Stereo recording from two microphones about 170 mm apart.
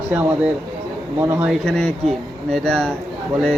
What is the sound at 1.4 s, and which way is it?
Speech, 5° left (ahead or behind).